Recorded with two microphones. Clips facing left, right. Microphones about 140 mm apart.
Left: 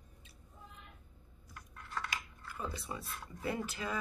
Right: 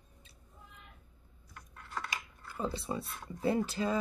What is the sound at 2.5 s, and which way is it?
Speech, 30° right (ahead or behind).